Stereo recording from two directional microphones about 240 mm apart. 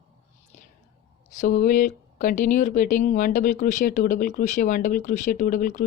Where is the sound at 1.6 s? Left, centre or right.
Left.